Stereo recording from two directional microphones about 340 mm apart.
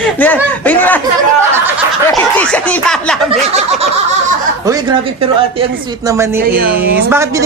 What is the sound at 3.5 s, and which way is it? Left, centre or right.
Snicker, centre.